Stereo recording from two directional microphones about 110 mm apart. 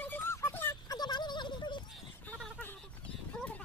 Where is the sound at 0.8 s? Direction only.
40° left (ahead or behind).